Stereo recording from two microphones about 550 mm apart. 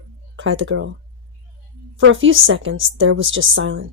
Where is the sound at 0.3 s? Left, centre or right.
Right.